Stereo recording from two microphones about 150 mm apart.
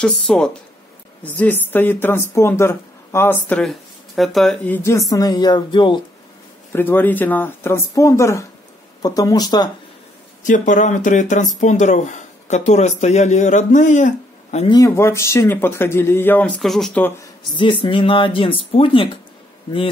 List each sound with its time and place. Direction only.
0.3 s speech: 5° left (ahead or behind)
4.6 s speech: 15° left (ahead or behind)
5.1 s speech: 25° left (ahead or behind)
6.7 s speech: 15° left (ahead or behind)
10.4 s speech: 60° left (ahead or behind)
14.7 s speech: 20° left (ahead or behind); by 17.0 s centre (ahead or behind)
17.5 s speech: 30° left (ahead or behind)